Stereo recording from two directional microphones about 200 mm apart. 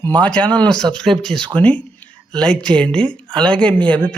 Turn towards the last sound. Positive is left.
turn(degrees=5)  # may be behind; listen again after turning